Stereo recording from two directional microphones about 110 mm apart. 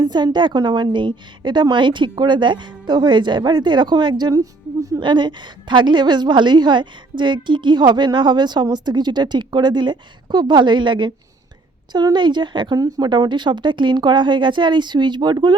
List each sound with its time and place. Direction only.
0.0 s a woman's voice: 40° right (ahead or behind)
4.9 s a woman's voice: 45° right (ahead or behind)